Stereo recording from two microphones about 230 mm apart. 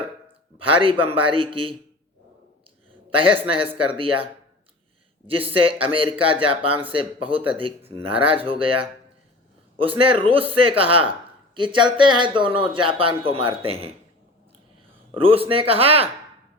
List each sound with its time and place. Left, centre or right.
0.6 s speech: right
3.1 s speech: right
5.5 s speech: right
10.0 s speech: right
15.1 s speech: right